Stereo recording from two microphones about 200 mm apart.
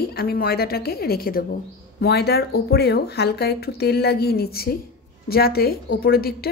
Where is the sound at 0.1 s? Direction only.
50° left (ahead or behind).